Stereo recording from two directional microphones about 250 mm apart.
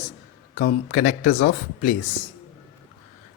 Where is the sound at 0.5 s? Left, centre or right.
Left.